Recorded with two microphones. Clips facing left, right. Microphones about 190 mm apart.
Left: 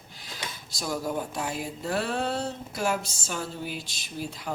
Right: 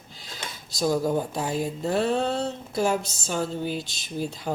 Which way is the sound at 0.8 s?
25° right (ahead or behind).